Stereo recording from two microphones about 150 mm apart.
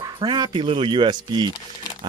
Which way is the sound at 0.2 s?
30° right (ahead or behind).